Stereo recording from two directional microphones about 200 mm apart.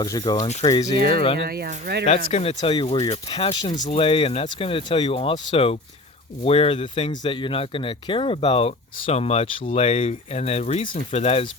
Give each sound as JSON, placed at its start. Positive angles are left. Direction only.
{"t": 0.0, "sound": "speech", "side_deg": 20}
{"t": 1.5, "sound": "speech", "side_deg": -50}
{"t": 2.0, "sound": "speech", "side_deg": 30}